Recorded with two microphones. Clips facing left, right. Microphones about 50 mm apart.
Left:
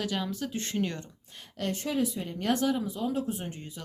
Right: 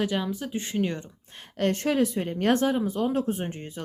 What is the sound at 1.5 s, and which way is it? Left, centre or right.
Speech, right.